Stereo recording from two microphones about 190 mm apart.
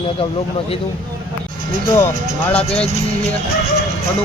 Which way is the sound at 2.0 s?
10° left (ahead or behind).